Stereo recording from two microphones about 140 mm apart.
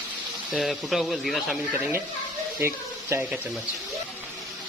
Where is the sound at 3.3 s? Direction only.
5° right (ahead or behind).